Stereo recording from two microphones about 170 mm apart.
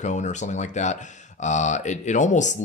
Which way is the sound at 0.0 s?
45° left (ahead or behind).